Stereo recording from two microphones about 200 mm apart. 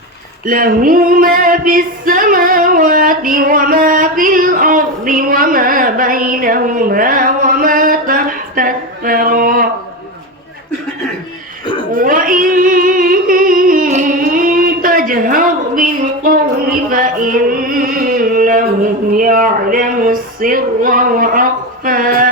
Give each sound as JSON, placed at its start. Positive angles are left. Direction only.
{"t": 0.4, "sound": "female singing", "side_deg": -45}
{"t": 11.9, "sound": "singing", "side_deg": -45}
{"t": 16.9, "sound": "music", "side_deg": -40}
{"t": 19.1, "sound": "a sound", "side_deg": -45}